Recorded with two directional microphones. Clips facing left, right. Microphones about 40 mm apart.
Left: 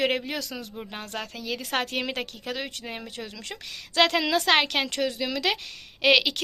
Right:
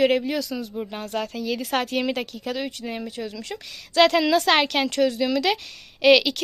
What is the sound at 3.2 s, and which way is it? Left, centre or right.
Speech, left.